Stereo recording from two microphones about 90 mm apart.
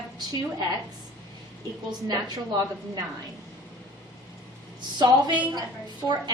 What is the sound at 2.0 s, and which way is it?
Speech, 50° right (ahead or behind).